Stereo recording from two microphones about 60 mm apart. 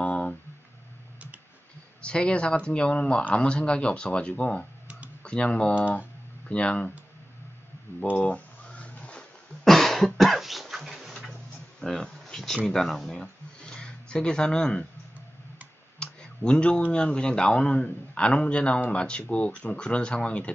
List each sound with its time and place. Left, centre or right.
0.0 s a sound: left
2.0 s speech: centre
8.1 s a sound: left
9.7 s cough: centre
11.8 s speech: centre
16.0 s clicking: centre
16.9 s speech: centre